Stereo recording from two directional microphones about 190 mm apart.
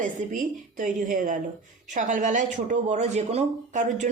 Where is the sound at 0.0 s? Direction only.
45° right (ahead or behind).